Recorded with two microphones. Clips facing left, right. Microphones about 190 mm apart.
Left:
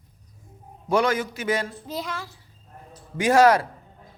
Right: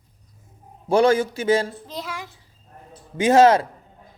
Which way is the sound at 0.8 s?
30° right (ahead or behind).